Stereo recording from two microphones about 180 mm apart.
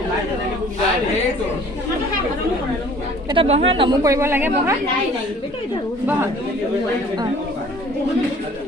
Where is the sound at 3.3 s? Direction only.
30° right (ahead or behind); by 4.8 s 10° right (ahead or behind).